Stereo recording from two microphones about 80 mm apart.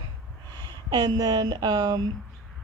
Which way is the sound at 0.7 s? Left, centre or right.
Right.